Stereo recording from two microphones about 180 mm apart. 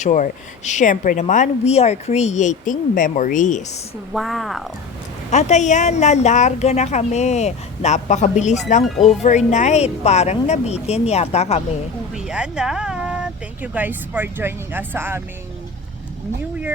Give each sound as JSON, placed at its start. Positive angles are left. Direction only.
{"t": 0.0, "sound": "speech", "side_deg": 40}
{"t": 4.1, "sound": "speech", "side_deg": 0}
{"t": 5.3, "sound": "a woman's voice", "side_deg": 40}
{"t": 12.1, "sound": "speech", "side_deg": -5}